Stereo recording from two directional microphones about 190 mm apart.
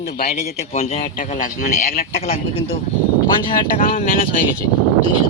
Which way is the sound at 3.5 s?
45° left (ahead or behind).